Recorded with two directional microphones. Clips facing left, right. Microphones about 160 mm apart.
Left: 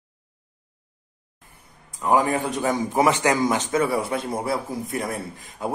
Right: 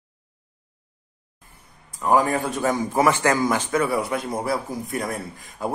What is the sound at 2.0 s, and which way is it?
A man's voice, 20° left (ahead or behind).